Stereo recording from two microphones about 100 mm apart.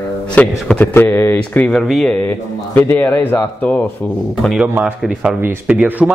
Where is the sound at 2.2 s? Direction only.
20° left (ahead or behind).